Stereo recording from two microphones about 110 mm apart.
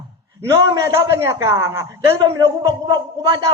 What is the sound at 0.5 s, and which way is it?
A man's voice, 35° right (ahead or behind).